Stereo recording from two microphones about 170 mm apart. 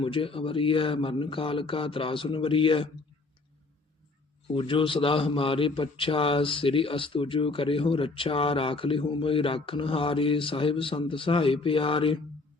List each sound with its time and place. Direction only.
0.0 s a man's voice: 30° left (ahead or behind)
4.4 s a man's voice: 30° left (ahead or behind)